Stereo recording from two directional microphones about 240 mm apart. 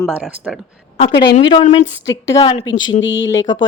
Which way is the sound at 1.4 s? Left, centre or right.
Left.